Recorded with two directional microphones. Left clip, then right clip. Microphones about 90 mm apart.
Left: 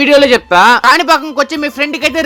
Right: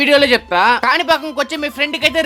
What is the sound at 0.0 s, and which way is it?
Speech, 30° left (ahead or behind).